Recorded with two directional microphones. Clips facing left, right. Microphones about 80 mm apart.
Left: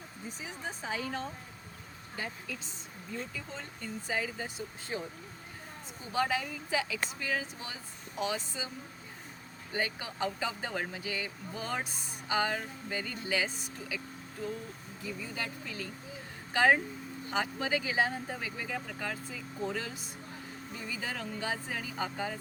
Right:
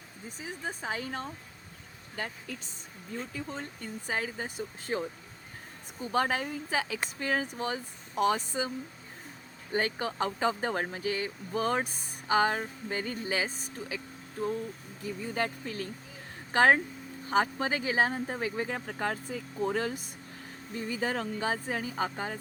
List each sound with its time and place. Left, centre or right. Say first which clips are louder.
0.4 s speech: right 4 dB; right
3.3 s speech: right 5 dB; right
6.1 s speech: right 2 dB; right
9.7 s speech: right 5 dB; right
15.0 s speech: right 6 dB; right